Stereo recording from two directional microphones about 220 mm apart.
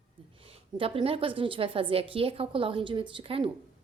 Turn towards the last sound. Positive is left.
turn(degrees=-25)  # may be behind; listen again after turning